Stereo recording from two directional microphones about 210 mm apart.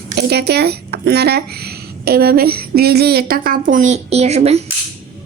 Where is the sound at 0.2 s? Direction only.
50° right (ahead or behind).